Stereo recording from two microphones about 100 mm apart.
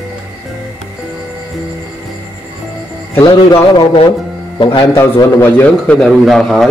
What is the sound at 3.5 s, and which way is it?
Speech, 65° left (ahead or behind).